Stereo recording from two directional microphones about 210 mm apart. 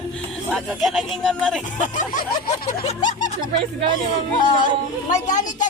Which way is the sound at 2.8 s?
35° left (ahead or behind).